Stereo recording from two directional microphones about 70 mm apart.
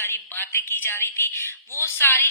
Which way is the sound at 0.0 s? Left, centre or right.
Left.